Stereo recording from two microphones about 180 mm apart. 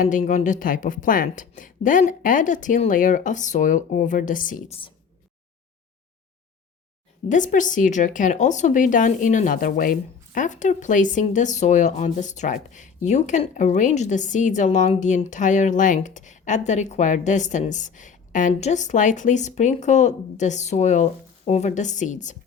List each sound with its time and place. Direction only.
0.0 s speech: 45° left (ahead or behind)
7.3 s speech: 45° left (ahead or behind)